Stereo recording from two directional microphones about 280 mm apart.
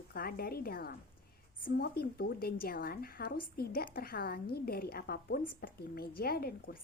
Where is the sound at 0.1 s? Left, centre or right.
Left.